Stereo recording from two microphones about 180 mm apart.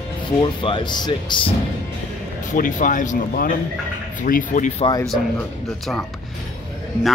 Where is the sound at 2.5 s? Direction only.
50° left (ahead or behind).